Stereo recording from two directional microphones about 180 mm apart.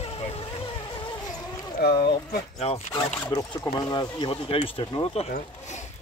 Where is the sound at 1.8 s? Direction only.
60° left (ahead or behind).